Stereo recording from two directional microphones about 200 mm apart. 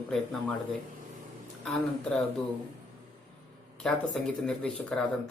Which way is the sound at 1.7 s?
5° left (ahead or behind).